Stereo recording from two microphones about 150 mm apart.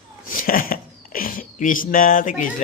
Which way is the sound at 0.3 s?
70° left (ahead or behind).